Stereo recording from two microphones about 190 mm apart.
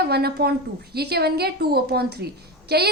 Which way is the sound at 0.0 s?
55° right (ahead or behind).